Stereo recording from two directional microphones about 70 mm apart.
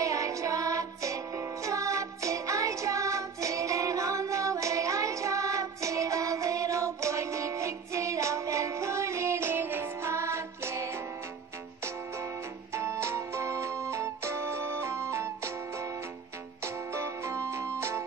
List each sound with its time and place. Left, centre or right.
0.0 s music: right
12.7 s music: right